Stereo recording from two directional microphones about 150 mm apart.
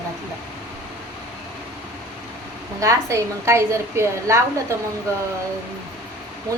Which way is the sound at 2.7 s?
20° right (ahead or behind).